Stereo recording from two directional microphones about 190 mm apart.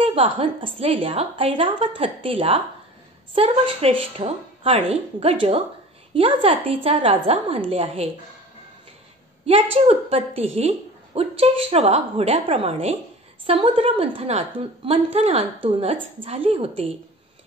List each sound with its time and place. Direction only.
0.0 s a woman's voice: 30° right (ahead or behind)
9.5 s a woman's voice: 30° right (ahead or behind)